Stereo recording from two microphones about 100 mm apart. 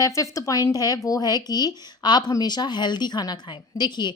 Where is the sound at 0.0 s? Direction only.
35° left (ahead or behind).